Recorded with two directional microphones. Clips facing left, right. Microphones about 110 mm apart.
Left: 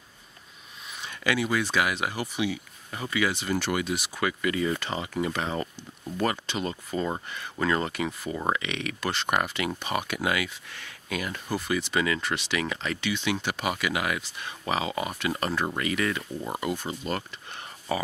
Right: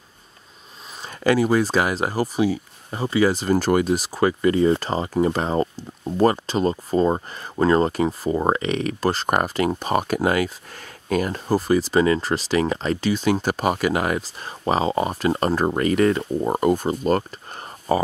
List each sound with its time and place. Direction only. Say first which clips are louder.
1.0 s speech: right 8 dB; 40° right (ahead or behind)